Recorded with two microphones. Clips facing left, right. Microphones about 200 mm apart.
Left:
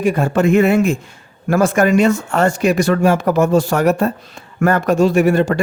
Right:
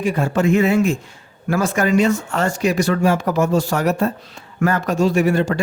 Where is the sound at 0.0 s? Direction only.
50° left (ahead or behind).